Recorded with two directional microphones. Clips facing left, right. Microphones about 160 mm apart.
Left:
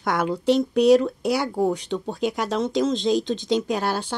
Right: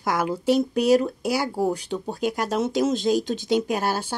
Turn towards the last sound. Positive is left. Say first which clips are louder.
# even
turn(degrees=-5)  # may be behind; listen again after turning